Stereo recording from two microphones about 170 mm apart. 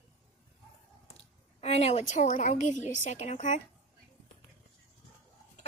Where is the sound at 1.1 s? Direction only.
40° left (ahead or behind).